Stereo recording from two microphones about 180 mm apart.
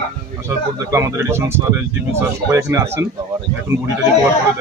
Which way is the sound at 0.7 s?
15° right (ahead or behind).